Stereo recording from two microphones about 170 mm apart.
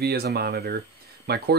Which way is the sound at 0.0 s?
65° right (ahead or behind).